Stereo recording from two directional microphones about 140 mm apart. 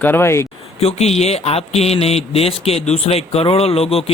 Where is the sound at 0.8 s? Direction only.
50° left (ahead or behind).